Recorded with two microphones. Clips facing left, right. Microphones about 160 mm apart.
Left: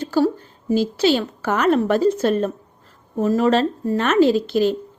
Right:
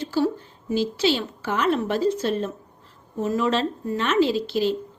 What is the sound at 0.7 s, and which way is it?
Speech, 45° left (ahead or behind).